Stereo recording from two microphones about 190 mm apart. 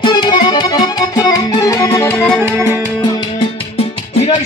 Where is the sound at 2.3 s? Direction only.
10° right (ahead or behind).